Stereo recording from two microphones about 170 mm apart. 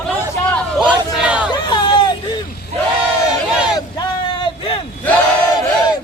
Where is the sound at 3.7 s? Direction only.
25° left (ahead or behind).